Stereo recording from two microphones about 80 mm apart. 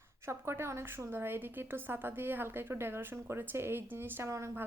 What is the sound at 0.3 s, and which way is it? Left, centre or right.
A woman's voice, right.